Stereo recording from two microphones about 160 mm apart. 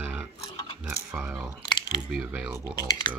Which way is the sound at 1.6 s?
25° left (ahead or behind).